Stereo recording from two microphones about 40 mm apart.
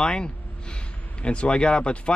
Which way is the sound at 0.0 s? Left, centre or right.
Centre.